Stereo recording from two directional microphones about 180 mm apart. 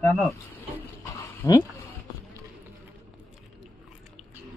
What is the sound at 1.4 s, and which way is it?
Speech, 20° left (ahead or behind).